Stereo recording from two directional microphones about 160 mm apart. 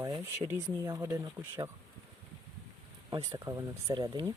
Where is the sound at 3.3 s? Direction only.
20° right (ahead or behind).